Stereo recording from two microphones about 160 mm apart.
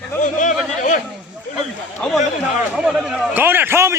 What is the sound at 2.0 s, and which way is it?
A man's voice, centre (ahead or behind).